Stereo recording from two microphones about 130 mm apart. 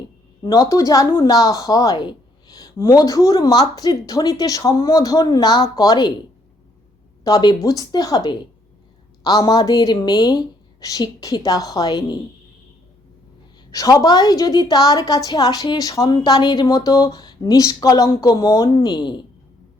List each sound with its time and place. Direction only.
0.4 s a woman's voice: 30° left (ahead or behind)
7.3 s a woman's voice: 30° left (ahead or behind)
13.7 s a woman's voice: 25° left (ahead or behind)